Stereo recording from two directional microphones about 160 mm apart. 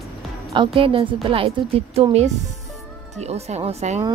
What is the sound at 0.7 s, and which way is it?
A woman's voice, 35° right (ahead or behind).